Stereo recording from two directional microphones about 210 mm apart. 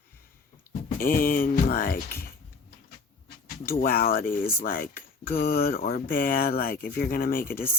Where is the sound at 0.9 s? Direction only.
45° left (ahead or behind).